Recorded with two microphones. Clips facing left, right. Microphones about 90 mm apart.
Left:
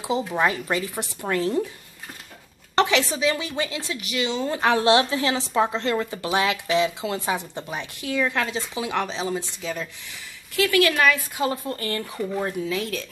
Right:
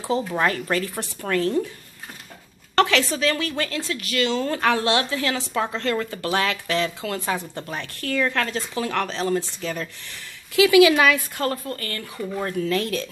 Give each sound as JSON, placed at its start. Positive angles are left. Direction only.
{"t": 0.4, "sound": "a woman's voice", "side_deg": 15}
{"t": 2.7, "sound": "a woman's voice", "side_deg": 20}
{"t": 11.3, "sound": "a woman's voice", "side_deg": 10}
{"t": 11.6, "sound": "speech", "side_deg": 25}
{"t": 12.4, "sound": "speech", "side_deg": 15}